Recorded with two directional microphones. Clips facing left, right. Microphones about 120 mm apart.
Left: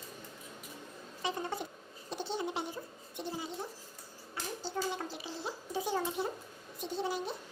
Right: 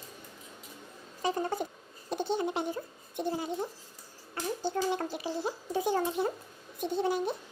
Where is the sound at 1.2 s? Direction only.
45° right (ahead or behind).